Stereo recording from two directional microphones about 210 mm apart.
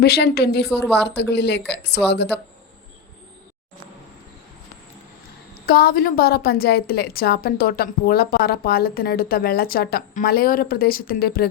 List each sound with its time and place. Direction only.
0.0 s a woman's voice: 50° left (ahead or behind)
5.6 s a woman's voice: 45° left (ahead or behind)